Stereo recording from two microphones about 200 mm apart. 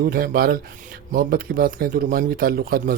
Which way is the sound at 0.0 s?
45° right (ahead or behind).